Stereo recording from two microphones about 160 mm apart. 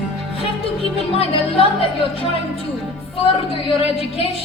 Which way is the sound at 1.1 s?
35° left (ahead or behind).